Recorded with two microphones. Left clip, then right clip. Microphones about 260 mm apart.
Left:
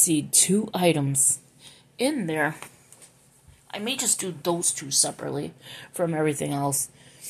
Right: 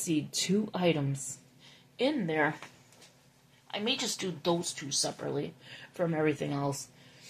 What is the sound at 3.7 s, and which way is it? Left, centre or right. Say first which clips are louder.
Speech: left 3 dB; left.